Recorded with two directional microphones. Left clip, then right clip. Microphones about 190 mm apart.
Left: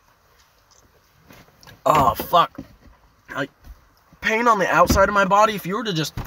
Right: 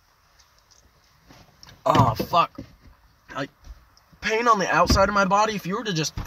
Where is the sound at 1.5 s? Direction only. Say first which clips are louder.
Left 3 dB; 20° left (ahead or behind).